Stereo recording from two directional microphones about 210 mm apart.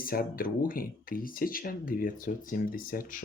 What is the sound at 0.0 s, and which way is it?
Speech, 45° left (ahead or behind).